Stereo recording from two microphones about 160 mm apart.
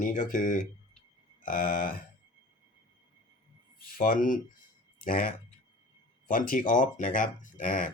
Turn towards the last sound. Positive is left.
turn(degrees=55)  # may be behind; listen again after turning